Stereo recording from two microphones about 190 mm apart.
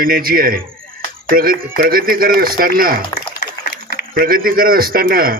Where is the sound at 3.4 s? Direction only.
50° left (ahead or behind).